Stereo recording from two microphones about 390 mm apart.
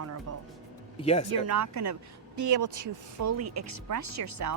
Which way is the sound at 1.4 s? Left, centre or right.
Right.